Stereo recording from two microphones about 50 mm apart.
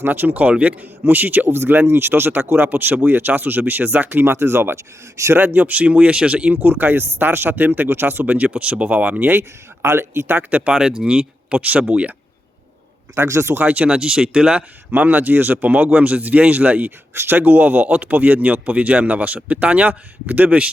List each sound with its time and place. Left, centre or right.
0.0 s speech: right
2.6 s speech: right
5.1 s speech: right
5.4 s speech: right
6.6 s speech: right
8.4 s speech: right
9.3 s speech: right
10.7 s speech: centre
13.1 s speech: right
13.6 s speech: right
13.8 s speech: centre
14.9 s speech: right
17.2 s speech: right